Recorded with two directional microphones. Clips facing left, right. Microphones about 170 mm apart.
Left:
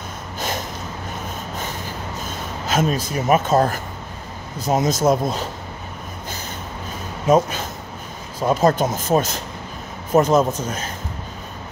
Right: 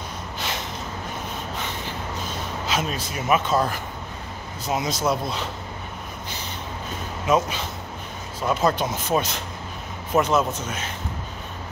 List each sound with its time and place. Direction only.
0.4 s a sound: 45° left (ahead or behind)
1.6 s gasp: 45° left (ahead or behind)
4.6 s speech: 45° left (ahead or behind)
7.2 s a man's voice: 45° left (ahead or behind)